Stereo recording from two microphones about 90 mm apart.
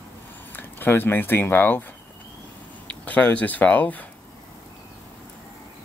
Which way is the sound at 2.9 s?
15° left (ahead or behind).